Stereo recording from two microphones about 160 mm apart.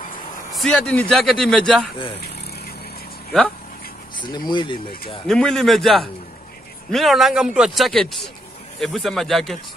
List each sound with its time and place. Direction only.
0.5 s speech: centre (ahead or behind)
4.2 s speech: 30° left (ahead or behind)
5.2 s speech: 5° left (ahead or behind)